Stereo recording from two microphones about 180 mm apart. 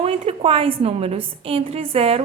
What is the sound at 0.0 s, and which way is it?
A woman's voice, 30° right (ahead or behind).